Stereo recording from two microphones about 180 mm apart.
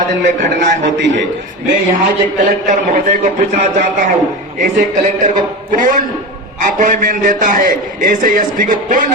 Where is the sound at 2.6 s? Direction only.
45° right (ahead or behind).